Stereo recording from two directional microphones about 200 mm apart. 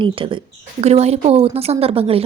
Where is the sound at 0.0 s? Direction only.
25° right (ahead or behind).